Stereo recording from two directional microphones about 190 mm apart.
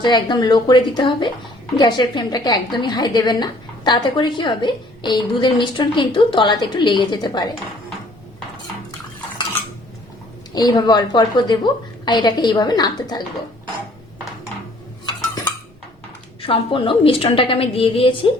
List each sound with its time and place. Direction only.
0.0 s a woman's voice: 25° left (ahead or behind)
10.5 s a woman's voice: 20° left (ahead or behind)
16.4 s a woman's voice: 30° left (ahead or behind)